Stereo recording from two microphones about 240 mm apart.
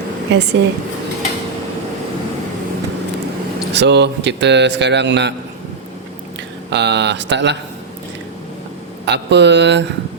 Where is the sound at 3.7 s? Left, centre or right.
Right.